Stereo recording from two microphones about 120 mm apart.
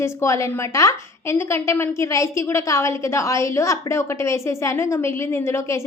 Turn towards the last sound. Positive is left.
turn(degrees=25)  # may be behind; listen again after turning